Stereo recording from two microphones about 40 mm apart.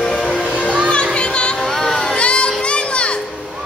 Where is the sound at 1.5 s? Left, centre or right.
Centre.